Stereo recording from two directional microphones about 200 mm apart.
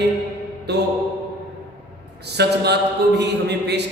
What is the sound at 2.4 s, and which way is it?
Speech, 55° right (ahead or behind).